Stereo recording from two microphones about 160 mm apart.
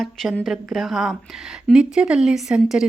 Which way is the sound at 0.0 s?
Centre (ahead or behind).